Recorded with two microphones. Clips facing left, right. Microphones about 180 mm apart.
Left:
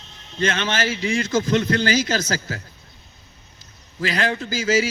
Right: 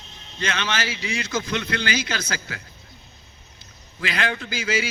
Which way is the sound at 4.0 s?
40° left (ahead or behind).